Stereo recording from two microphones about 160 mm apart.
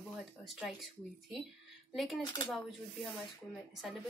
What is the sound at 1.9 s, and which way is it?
Speech, centre (ahead or behind).